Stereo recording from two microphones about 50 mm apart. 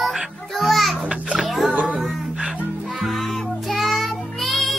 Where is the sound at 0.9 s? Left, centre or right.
Right.